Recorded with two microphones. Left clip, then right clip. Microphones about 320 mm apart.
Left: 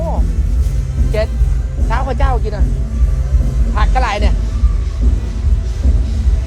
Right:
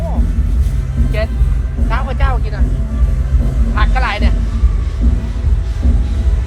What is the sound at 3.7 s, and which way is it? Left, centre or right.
Vehicle, left.